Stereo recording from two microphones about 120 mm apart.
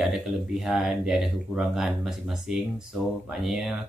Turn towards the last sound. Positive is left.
turn(degrees=-5)  # may be behind; listen again after turning